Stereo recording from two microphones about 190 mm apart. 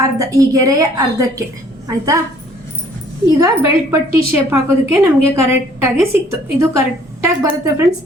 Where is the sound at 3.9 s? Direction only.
15° right (ahead or behind).